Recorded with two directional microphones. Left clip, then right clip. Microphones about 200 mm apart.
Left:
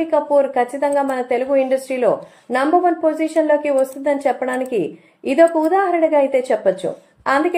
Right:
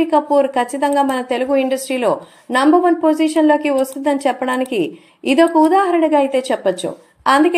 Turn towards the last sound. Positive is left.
turn(degrees=-30)  # may be behind; listen again after turning